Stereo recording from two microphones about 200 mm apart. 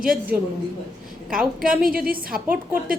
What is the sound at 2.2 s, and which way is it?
Speech, 45° right (ahead or behind).